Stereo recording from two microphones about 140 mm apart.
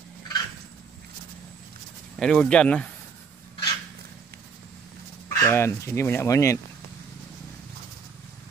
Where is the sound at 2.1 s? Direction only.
5° left (ahead or behind).